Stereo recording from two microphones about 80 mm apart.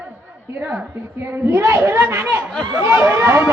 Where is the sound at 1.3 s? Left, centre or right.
Right.